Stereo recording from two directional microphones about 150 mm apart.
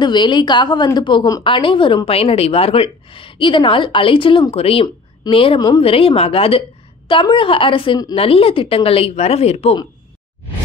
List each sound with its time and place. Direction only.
0.0 s speech: 30° left (ahead or behind)